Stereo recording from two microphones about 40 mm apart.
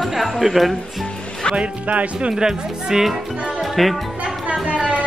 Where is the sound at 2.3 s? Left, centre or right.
Centre.